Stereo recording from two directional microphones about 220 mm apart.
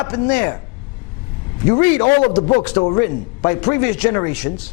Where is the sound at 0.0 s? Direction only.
30° left (ahead or behind).